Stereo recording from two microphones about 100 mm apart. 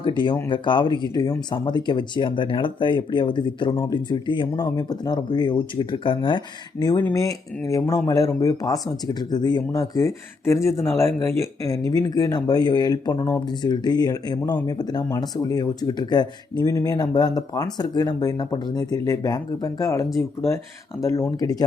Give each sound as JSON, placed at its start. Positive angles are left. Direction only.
{"t": 0.0, "sound": "speech", "side_deg": 50}
{"t": 1.1, "sound": "speech", "side_deg": 40}
{"t": 3.7, "sound": "speech", "side_deg": 35}
{"t": 3.9, "sound": "speech", "side_deg": 50}